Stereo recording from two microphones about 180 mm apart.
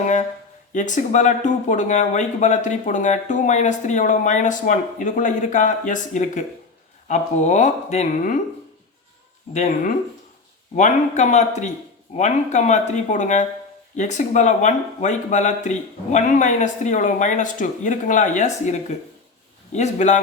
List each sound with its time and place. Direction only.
0.7 s speech: 45° left (ahead or behind)
9.5 s speech: 40° left (ahead or behind)